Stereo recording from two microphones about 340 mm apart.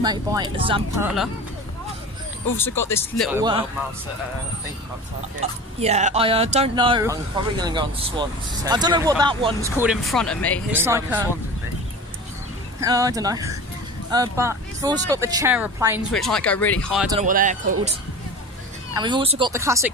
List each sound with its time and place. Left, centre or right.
0.0 s speech: centre
2.5 s speech: centre
3.3 s speech: centre
5.4 s speech: centre
10.7 s speech: centre
12.8 s speech: centre
17.1 s speech: right
18.9 s speech: centre